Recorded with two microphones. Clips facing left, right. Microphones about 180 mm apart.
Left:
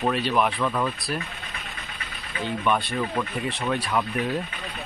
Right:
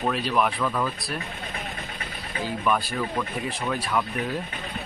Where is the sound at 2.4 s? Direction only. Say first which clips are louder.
Left 1 dB; centre (ahead or behind).